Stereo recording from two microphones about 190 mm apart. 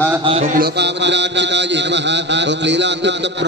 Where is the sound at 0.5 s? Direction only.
60° right (ahead or behind).